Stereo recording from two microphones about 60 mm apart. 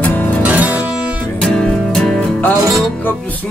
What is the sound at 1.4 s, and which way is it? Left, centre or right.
Music, centre.